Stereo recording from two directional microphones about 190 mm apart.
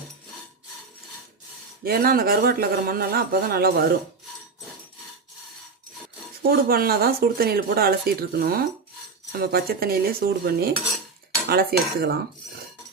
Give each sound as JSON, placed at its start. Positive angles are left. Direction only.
{"t": 1.8, "sound": "speech", "side_deg": -50}
{"t": 6.4, "sound": "speech", "side_deg": -50}